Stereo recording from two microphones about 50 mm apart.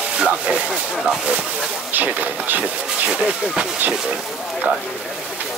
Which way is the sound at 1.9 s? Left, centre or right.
Right.